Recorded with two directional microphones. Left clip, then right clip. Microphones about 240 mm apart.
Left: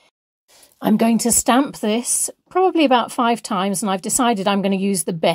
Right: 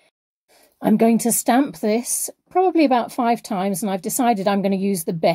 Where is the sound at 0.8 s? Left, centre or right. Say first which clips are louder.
Right 1 dB; centre.